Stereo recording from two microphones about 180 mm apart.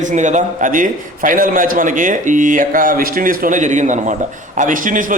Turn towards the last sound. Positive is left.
turn(degrees=-50)  # may be behind; listen again after turning